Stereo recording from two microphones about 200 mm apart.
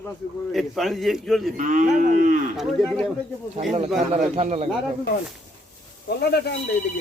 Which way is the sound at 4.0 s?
35° right (ahead or behind).